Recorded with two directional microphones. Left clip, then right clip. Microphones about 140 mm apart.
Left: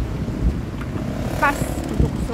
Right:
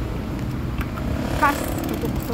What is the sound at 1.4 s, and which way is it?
Speech, 30° left (ahead or behind).